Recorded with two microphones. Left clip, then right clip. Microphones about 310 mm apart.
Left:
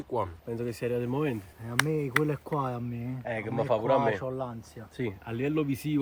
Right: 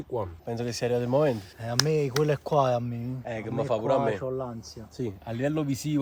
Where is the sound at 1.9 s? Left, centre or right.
Right.